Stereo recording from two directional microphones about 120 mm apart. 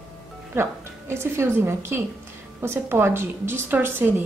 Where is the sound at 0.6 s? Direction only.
20° right (ahead or behind).